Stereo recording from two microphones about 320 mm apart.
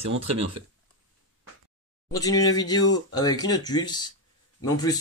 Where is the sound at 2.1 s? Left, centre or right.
Centre.